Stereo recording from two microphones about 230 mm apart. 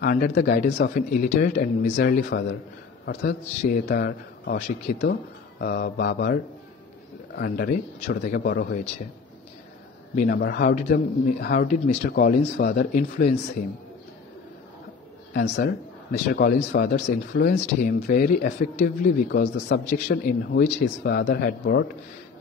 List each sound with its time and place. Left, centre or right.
0.0 s speech: left
2.0 s speech: left
5.6 s speech: left
10.1 s speech: left
11.9 s speech: left
12.9 s speech: left
15.3 s speech: left
19.2 s speech: left
20.2 s speech: left
20.8 s speech: left